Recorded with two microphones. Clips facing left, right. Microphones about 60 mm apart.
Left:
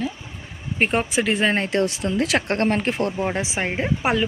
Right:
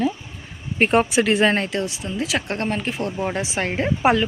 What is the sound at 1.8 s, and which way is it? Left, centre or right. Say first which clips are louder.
Speech: left 4 dB; left.